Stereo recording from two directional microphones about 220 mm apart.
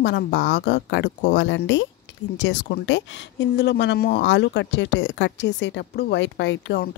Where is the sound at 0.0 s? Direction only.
55° left (ahead or behind).